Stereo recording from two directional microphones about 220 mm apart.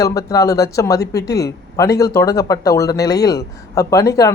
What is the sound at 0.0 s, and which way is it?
Speech, 15° left (ahead or behind).